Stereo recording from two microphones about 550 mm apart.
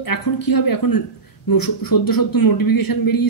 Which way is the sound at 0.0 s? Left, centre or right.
Left.